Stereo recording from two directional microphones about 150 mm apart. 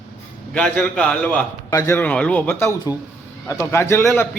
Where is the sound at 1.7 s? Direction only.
20° left (ahead or behind).